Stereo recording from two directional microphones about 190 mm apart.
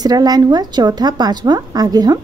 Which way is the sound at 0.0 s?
20° right (ahead or behind).